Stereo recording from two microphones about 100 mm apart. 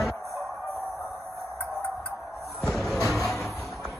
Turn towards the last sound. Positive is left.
turn(degrees=0)  # may be behind; listen again after turning